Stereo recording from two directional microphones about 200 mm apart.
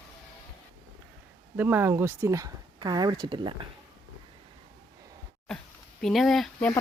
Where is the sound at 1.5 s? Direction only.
10° right (ahead or behind).